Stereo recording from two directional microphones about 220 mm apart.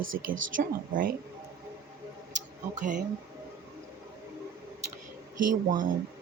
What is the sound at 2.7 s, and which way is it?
Music, 35° right (ahead or behind).